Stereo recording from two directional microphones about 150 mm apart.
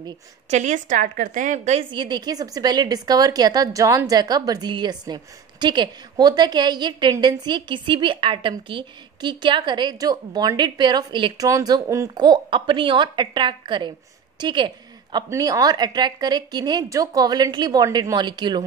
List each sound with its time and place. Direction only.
0.5 s a woman's voice: 50° right (ahead or behind)
1.9 s a woman's voice: 30° right (ahead or behind)